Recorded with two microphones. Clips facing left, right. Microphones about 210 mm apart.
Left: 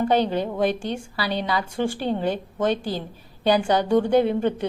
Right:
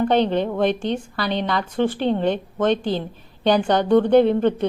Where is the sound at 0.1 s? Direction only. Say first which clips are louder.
Right 3 dB; 10° left (ahead or behind).